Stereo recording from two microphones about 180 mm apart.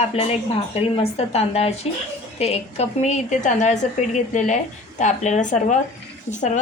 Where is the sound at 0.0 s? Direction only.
35° left (ahead or behind).